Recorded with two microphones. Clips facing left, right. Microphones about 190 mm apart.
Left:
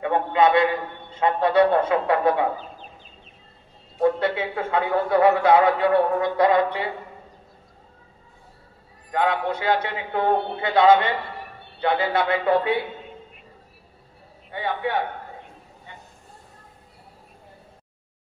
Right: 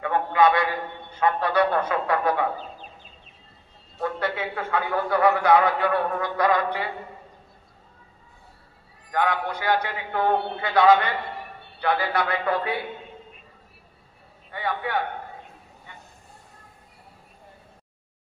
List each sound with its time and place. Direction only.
0.0 s a sound: 25° left (ahead or behind)
1.2 s a man's voice: 25° left (ahead or behind)
4.0 s a man's voice: 25° left (ahead or behind)
9.1 s a man's voice: 25° left (ahead or behind)
14.5 s a man's voice: 25° left (ahead or behind)